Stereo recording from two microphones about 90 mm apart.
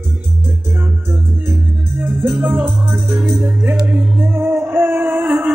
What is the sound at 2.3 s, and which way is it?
Music, 20° right (ahead or behind).